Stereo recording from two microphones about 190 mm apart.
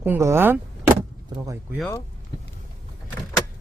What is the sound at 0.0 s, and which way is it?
Speech, 10° right (ahead or behind).